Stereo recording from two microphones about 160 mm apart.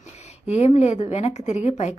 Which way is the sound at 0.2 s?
40° left (ahead or behind).